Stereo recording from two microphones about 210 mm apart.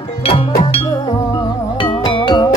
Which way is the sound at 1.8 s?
20° left (ahead or behind).